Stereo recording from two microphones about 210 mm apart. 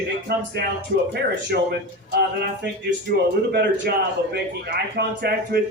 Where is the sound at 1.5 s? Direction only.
50° right (ahead or behind).